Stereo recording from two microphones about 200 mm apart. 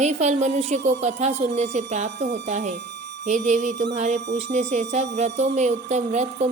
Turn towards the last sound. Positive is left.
turn(degrees=-35)  # may be behind; listen again after turning